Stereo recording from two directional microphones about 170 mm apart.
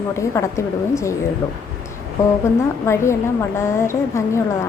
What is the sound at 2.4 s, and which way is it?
A woman's voice, 15° left (ahead or behind).